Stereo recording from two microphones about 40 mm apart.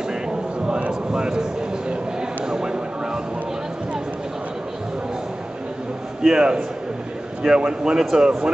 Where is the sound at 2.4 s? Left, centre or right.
Centre.